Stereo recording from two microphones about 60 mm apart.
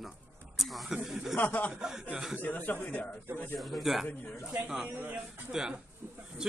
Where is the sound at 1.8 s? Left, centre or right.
Centre.